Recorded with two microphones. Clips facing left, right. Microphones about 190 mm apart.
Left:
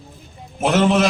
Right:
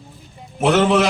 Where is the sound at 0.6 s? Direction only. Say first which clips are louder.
Right 1 dB; 70° right (ahead or behind).